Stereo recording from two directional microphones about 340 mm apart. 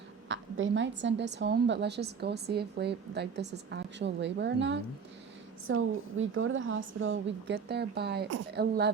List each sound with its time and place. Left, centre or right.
0.3 s a woman's voice: right